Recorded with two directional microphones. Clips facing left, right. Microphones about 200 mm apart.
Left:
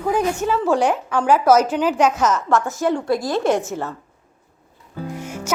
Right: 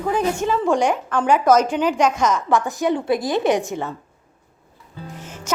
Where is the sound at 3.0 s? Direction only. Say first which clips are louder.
Even; 20° right (ahead or behind).